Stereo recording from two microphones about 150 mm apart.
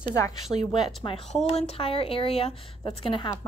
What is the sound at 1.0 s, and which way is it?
Speech, 35° left (ahead or behind).